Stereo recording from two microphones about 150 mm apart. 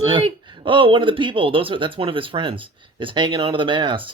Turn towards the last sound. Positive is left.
turn(degrees=-35)  # may be behind; listen again after turning